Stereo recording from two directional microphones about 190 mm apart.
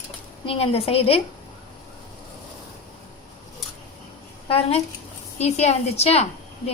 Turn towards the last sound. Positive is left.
turn(degrees=35)  # may be behind; listen again after turning